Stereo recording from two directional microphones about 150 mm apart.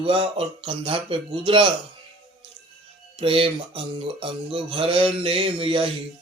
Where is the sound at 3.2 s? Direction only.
40° right (ahead or behind).